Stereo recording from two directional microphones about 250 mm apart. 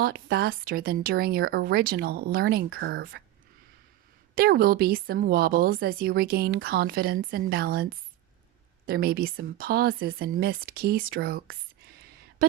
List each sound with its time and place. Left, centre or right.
0.0 s a woman's voice: right
4.4 s a woman's voice: right